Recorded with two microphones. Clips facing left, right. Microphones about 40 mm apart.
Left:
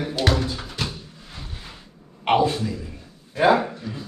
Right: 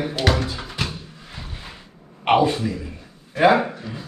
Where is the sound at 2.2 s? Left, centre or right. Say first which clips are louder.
Right 2 dB; right.